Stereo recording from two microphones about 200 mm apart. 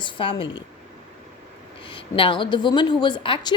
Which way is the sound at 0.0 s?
25° left (ahead or behind).